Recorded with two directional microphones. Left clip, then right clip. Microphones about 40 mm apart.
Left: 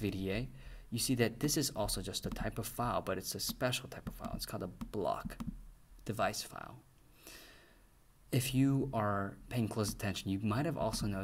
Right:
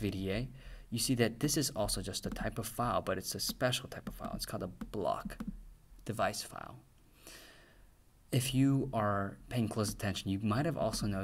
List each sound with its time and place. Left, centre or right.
0.0 s speech: right
7.2 s a sound: right
8.3 s speech: right